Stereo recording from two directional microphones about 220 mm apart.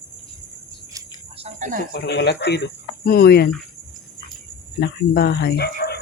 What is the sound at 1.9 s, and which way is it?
Speech, 50° left (ahead or behind).